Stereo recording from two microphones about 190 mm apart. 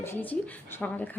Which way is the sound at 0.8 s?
5° left (ahead or behind).